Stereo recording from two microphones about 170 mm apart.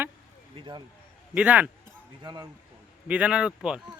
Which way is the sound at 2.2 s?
25° right (ahead or behind).